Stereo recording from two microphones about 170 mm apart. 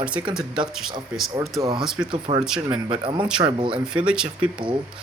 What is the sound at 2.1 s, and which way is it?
Speech, 30° right (ahead or behind).